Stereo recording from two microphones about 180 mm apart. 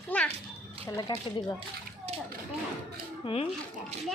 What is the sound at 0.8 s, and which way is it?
Speech, 25° left (ahead or behind).